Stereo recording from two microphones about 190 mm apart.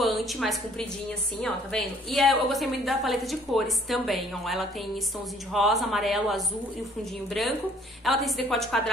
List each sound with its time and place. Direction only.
0.0 s a woman's voice: centre (ahead or behind)